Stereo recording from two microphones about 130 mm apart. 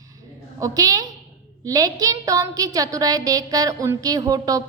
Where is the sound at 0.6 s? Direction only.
30° right (ahead or behind).